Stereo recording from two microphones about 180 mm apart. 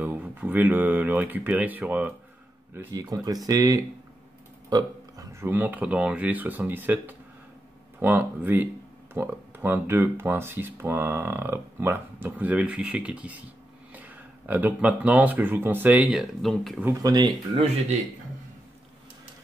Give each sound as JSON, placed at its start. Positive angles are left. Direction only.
{"t": 0.0, "sound": "speech", "side_deg": -10}
{"t": 2.9, "sound": "speech", "side_deg": -20}
{"t": 16.8, "sound": "speech", "side_deg": -20}